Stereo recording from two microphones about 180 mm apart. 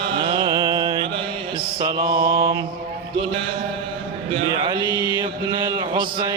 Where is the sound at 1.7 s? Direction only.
25° right (ahead or behind).